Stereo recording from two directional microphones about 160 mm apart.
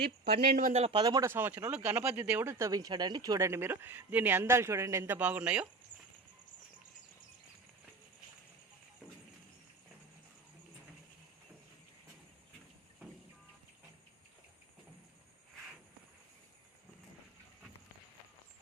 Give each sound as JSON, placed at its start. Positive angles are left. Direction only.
{"t": 0.0, "sound": "speech", "side_deg": -85}
{"t": 0.7, "sound": "speech", "side_deg": -35}